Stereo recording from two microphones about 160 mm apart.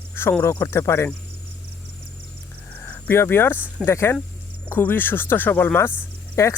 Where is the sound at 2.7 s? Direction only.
10° left (ahead or behind).